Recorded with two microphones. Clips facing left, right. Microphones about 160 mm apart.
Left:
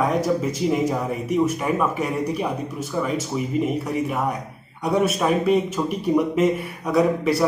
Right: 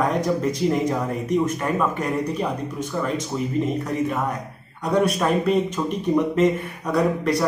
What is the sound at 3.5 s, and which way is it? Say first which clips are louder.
Speech: left 1 dB; 10° left (ahead or behind).